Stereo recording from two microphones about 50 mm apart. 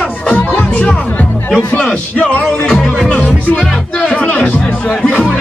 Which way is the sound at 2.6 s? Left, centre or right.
Centre.